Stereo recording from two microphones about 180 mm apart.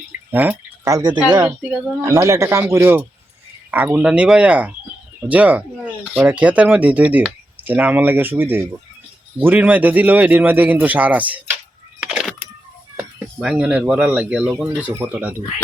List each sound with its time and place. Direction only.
0.3 s a woman's voice: 10° right (ahead or behind)
11.9 s keys jangling: 5° right (ahead or behind)
13.4 s speech: 5° right (ahead or behind)